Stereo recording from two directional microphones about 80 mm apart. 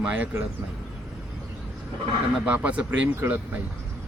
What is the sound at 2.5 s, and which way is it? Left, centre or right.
A man's voice, centre.